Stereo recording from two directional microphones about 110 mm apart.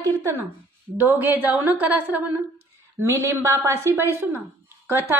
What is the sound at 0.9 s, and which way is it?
A woman's voice, 15° right (ahead or behind).